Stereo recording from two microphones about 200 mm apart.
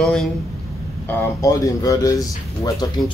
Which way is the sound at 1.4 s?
15° left (ahead or behind).